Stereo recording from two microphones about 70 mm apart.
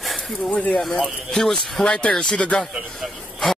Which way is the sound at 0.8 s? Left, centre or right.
Centre.